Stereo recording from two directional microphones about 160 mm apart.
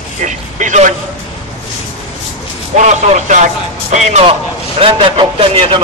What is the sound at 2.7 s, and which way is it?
A man's voice, 50° right (ahead or behind).